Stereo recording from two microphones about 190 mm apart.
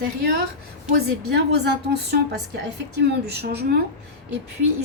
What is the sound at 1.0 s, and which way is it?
A woman's voice, 60° right (ahead or behind).